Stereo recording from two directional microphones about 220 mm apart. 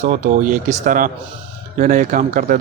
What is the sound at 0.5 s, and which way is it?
Speech, 35° right (ahead or behind).